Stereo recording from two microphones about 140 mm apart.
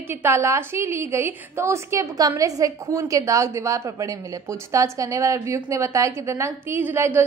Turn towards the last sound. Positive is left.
turn(degrees=-15)  # may be behind; listen again after turning